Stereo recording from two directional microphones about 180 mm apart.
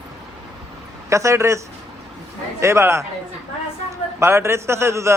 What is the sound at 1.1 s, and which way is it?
A man's voice, 15° right (ahead or behind).